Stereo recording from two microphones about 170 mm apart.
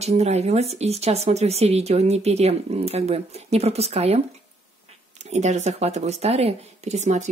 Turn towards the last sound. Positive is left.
turn(degrees=-40)  # may be behind; listen again after turning